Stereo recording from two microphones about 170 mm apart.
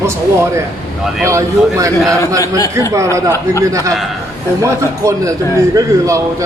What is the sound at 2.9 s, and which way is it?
A man's voice, 15° right (ahead or behind).